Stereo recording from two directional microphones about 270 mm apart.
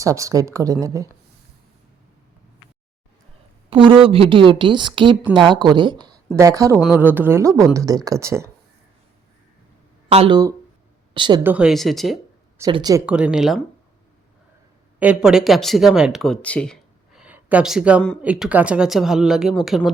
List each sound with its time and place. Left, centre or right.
0.0 s speech: centre
3.7 s a woman's voice: centre
6.7 s speech: centre
10.1 s speech: centre
11.5 s speech: centre
12.5 s speech: centre
14.9 s speech: centre